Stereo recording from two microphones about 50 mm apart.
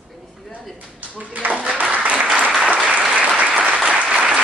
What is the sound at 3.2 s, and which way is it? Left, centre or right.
Applause, right.